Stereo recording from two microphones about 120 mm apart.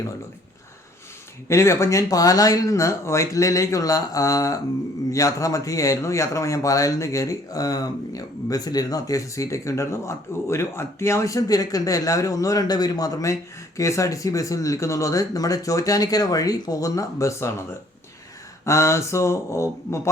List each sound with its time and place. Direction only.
1.5 s a man's voice: 25° left (ahead or behind)